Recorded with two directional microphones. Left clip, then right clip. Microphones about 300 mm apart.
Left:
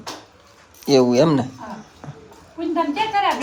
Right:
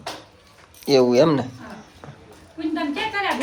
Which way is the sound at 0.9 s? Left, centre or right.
Centre.